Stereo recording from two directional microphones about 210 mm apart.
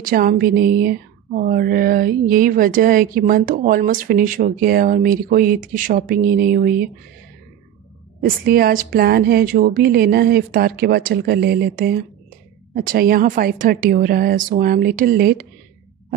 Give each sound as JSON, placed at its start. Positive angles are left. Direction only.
{"t": 0.0, "sound": "speech", "side_deg": -40}
{"t": 8.2, "sound": "speech", "side_deg": -45}